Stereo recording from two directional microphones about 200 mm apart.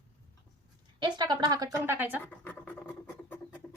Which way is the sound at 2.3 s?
10° left (ahead or behind).